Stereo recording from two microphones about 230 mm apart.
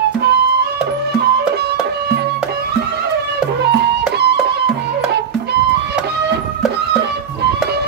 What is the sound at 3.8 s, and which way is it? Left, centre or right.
Music, right.